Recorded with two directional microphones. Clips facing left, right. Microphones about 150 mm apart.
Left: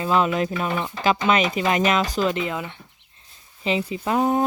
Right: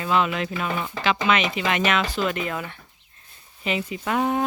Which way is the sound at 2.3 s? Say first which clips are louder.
Left 2 dB; 20° left (ahead or behind).